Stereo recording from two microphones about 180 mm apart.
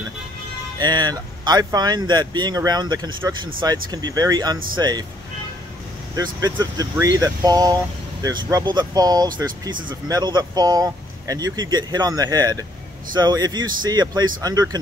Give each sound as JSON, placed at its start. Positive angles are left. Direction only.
{"t": 0.7, "sound": "speech", "side_deg": -25}
{"t": 6.1, "sound": "speech", "side_deg": -20}